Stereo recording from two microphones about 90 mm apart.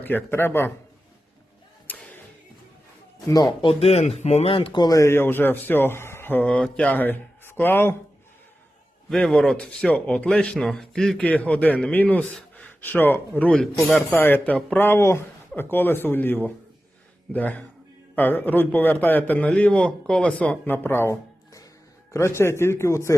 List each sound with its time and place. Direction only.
0.0 s speech: 20° left (ahead or behind)
1.9 s music: 15° left (ahead or behind)
3.2 s a man's voice: 40° left (ahead or behind)
3.6 s speech: 90° left
4.8 s a man's voice: 40° left (ahead or behind)
5.1 s speech: 25° left (ahead or behind)
9.0 s speech: 5° left (ahead or behind)
11.3 s speech: 15° left (ahead or behind)
20.7 s a man's voice: 25° left (ahead or behind)